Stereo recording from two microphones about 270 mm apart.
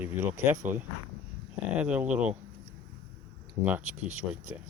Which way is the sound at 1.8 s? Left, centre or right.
Centre.